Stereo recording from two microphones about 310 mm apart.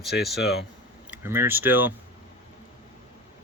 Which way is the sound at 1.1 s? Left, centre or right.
Centre.